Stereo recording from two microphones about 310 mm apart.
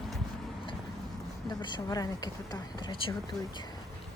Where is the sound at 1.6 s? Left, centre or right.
Centre.